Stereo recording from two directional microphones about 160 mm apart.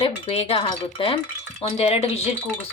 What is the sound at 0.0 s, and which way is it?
Speech, 40° left (ahead or behind).